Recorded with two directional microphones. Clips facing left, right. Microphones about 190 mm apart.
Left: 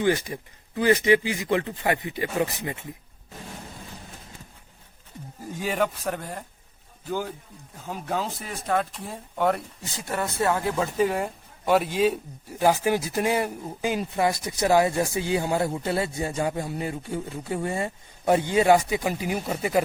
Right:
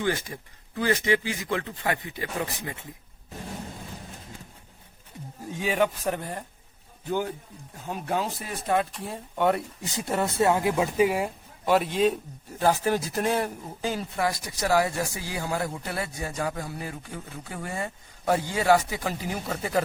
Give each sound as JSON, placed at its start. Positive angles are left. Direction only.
{"t": 0.0, "sound": "speech", "side_deg": 15}
{"t": 5.5, "sound": "speech", "side_deg": 0}
{"t": 8.0, "sound": "speech", "side_deg": -5}
{"t": 9.8, "sound": "speech", "side_deg": -20}
{"t": 12.5, "sound": "speech", "side_deg": 15}